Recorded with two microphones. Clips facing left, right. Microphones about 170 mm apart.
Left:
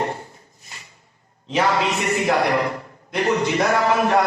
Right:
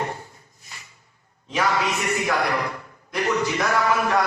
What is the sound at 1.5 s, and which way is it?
Speech, 25° left (ahead or behind).